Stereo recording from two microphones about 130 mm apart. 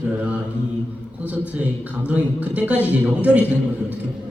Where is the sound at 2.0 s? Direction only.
10° right (ahead or behind).